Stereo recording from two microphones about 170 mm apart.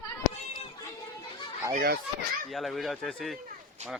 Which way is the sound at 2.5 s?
Centre (ahead or behind).